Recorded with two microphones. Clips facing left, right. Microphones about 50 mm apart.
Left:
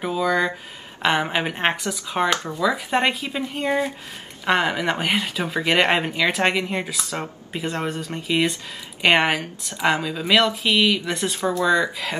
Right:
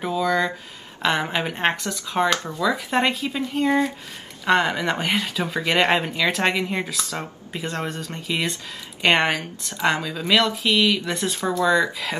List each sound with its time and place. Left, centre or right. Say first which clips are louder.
0.0 s speech: left 1 dB; centre